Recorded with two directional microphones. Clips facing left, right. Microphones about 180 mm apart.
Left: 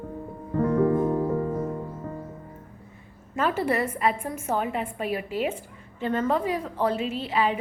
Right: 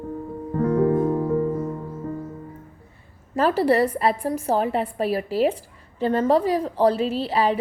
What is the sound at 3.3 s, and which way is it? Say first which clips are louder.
A woman's voice: right 6 dB; 35° right (ahead or behind).